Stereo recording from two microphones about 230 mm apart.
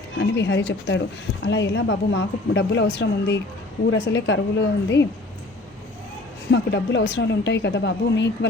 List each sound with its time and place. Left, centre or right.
0.2 s a woman's voice: left
6.5 s a woman's voice: left